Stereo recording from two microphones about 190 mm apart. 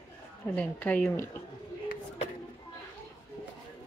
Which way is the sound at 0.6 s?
5° left (ahead or behind).